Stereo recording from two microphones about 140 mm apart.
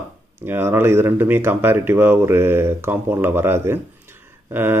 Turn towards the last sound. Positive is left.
turn(degrees=-15)  # may be behind; listen again after turning